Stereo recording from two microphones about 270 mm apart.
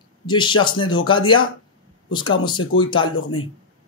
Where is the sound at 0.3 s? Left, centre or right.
Centre.